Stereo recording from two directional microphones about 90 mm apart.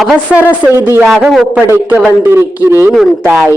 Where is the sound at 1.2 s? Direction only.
Centre (ahead or behind).